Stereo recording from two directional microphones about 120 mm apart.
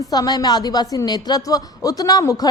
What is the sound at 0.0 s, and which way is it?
A woman's voice, 30° left (ahead or behind).